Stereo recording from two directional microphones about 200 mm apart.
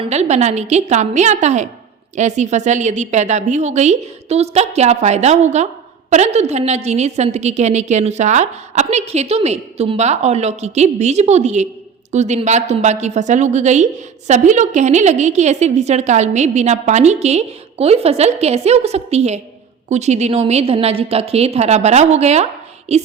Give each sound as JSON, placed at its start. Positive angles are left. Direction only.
{"t": 0.0, "sound": "a woman's voice", "side_deg": -35}